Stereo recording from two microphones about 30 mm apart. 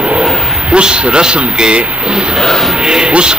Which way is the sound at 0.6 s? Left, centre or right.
Right.